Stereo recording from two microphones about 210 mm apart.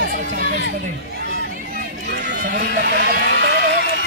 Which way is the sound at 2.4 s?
50° right (ahead or behind).